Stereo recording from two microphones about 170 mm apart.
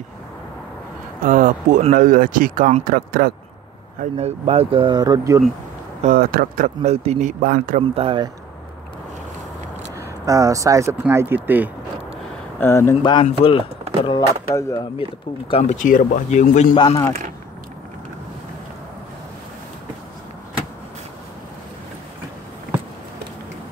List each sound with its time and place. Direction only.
1.2 s speech: 50° right (ahead or behind)
4.0 s speech: 40° right (ahead or behind); by 5.4 s 20° right (ahead or behind)
6.0 s speech: 60° right (ahead or behind); by 7.3 s 40° right (ahead or behind)
7.4 s speech: 55° right (ahead or behind)
7.9 s speech: 30° right (ahead or behind)
9.9 s speech: 20° right (ahead or behind)
12.5 s speech: 15° left (ahead or behind)
13.0 s speech: 30° left (ahead or behind)
14.5 s speech: 15° left (ahead or behind)
15.5 s speech: 45° left (ahead or behind)
16.7 s speech: 25° left (ahead or behind)